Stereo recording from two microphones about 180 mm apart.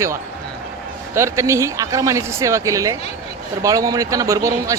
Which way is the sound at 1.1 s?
15° right (ahead or behind).